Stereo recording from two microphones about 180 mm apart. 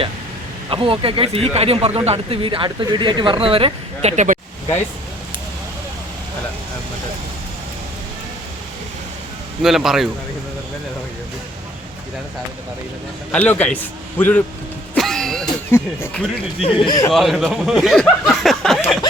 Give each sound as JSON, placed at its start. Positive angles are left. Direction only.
{"t": 0.7, "sound": "speech", "side_deg": -30}
{"t": 9.6, "sound": "speech", "side_deg": 0}
{"t": 13.3, "sound": "speech", "side_deg": 10}
{"t": 14.9, "sound": "music", "side_deg": 0}
{"t": 15.7, "sound": "speech", "side_deg": 15}
{"t": 16.6, "sound": "speech", "side_deg": 30}
{"t": 17.1, "sound": "speech", "side_deg": 0}